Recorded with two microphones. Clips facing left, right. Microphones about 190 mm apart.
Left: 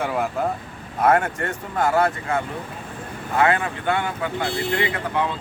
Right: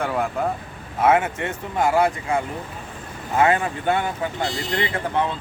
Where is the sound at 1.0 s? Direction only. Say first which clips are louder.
Even; 5° right (ahead or behind); by 3.9 s 20° right (ahead or behind).